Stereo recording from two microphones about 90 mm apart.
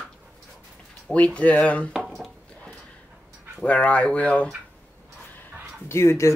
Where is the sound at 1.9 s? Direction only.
Centre (ahead or behind).